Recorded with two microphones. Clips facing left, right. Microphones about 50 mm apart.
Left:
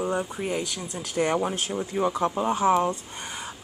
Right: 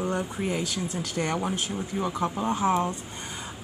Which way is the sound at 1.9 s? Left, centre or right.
Left.